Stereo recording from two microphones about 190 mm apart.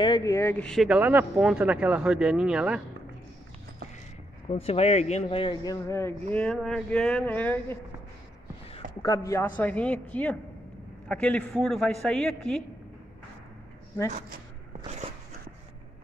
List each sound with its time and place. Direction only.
0.0 s speech: 20° left (ahead or behind); by 2.8 s 5° right (ahead or behind)
4.5 s speech: 30° left (ahead or behind); by 6.1 s 15° left (ahead or behind)
6.3 s speech: 5° left (ahead or behind)
9.0 s speech: 20° left (ahead or behind)